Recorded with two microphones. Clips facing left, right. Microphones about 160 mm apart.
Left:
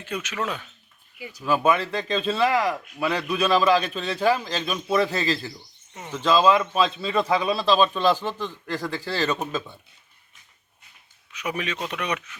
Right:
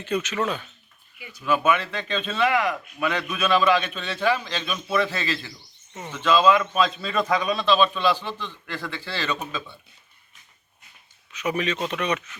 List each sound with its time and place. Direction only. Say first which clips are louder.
0.0 s speech: right 4 dB; 10° left (ahead or behind)
1.2 s speech: left 1 dB; 35° left (ahead or behind)
11.3 s speech: right 4 dB; 10° left (ahead or behind)